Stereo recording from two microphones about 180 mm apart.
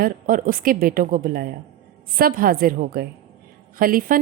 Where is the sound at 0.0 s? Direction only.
50° right (ahead or behind).